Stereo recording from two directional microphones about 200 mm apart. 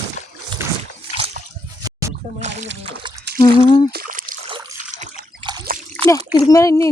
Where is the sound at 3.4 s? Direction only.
20° left (ahead or behind).